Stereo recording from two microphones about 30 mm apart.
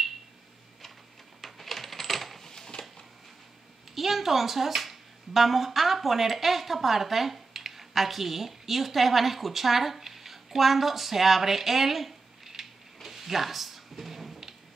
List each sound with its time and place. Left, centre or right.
1.4 s coin: centre
2.4 s a sound: centre
3.9 s speech: centre